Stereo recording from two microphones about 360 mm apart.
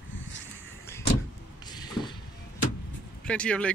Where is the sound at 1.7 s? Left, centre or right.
Centre.